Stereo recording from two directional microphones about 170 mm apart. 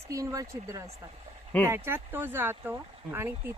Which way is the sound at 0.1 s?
20° right (ahead or behind).